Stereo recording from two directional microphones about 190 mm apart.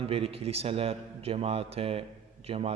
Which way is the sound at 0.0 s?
30° right (ahead or behind).